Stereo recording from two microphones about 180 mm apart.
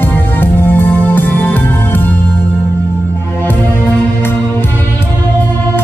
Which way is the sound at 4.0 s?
10° left (ahead or behind).